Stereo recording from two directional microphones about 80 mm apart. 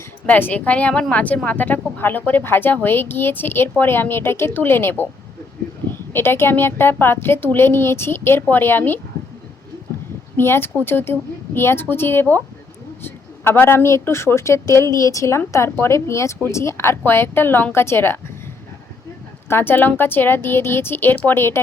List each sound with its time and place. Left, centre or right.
0.3 s a woman's voice: left
10.3 s a woman's voice: left
19.5 s a woman's voice: left